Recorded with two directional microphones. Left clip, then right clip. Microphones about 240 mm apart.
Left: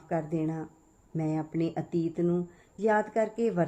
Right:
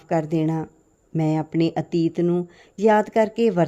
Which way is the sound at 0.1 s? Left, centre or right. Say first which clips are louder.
Right 9 dB; right.